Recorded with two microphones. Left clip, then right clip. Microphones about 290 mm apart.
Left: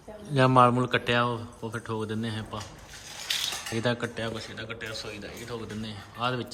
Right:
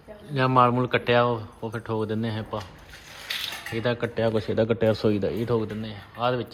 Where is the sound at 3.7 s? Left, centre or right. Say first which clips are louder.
Right 5 dB; centre.